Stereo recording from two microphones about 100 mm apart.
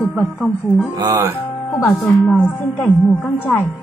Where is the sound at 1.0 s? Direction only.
35° right (ahead or behind).